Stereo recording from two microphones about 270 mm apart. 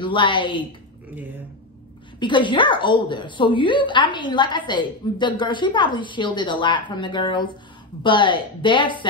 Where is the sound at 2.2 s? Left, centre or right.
Centre.